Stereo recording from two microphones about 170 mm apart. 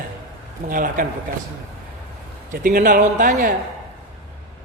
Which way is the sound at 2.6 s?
55° right (ahead or behind).